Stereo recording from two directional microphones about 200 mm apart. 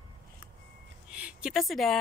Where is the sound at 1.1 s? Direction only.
5° right (ahead or behind).